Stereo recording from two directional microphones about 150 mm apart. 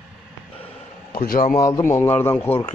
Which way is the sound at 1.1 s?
70° left (ahead or behind).